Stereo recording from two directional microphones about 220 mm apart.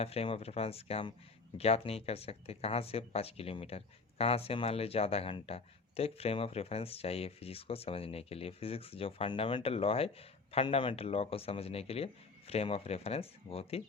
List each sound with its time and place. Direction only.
0.0 s speech: 25° left (ahead or behind)